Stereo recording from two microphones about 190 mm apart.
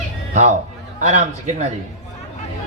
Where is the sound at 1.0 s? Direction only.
40° right (ahead or behind).